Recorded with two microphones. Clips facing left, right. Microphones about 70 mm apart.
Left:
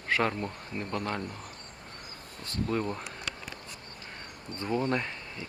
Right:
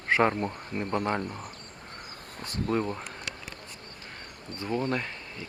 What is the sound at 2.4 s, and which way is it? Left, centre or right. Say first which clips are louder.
Speech: right 2 dB; centre.